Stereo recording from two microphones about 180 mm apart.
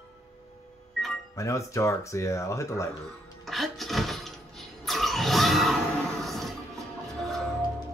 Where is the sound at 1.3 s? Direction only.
15° left (ahead or behind).